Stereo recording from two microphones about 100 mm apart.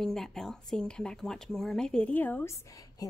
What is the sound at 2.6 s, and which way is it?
Speech, 35° left (ahead or behind).